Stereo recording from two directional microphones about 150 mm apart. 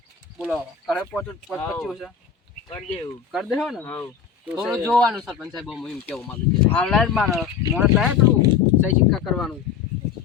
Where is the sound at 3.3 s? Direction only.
Centre (ahead or behind).